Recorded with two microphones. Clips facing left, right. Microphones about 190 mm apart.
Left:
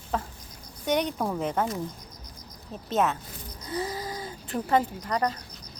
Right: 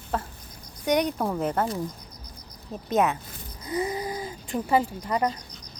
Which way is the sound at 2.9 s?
15° right (ahead or behind).